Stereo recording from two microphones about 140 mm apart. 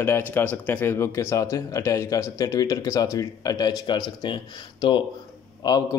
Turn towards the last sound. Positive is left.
turn(degrees=30)  # may be behind; listen again after turning